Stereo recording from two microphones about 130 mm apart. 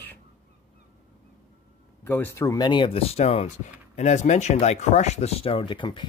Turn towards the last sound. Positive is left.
turn(degrees=40)  # may be behind; listen again after turning